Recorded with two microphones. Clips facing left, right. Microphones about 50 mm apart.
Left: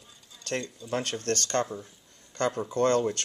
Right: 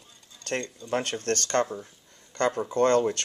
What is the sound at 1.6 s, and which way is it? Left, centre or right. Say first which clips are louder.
Speech: right 3 dB; centre.